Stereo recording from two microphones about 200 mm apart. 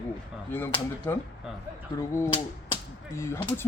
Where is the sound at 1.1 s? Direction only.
10° left (ahead or behind).